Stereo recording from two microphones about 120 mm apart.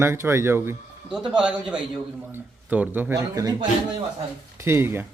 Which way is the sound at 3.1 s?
30° right (ahead or behind).